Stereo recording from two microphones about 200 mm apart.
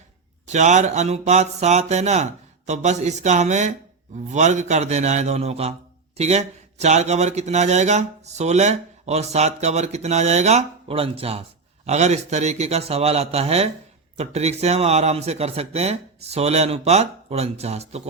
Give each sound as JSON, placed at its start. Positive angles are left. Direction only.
{"t": 0.4, "sound": "speech", "side_deg": -35}